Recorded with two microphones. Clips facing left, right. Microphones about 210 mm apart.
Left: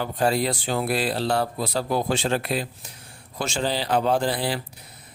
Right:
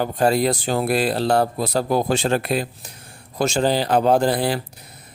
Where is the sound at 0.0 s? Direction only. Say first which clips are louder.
Right 4 dB; 45° right (ahead or behind).